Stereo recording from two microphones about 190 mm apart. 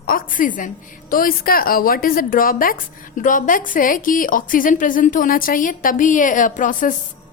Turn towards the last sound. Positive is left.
turn(degrees=45)  # may be behind; listen again after turning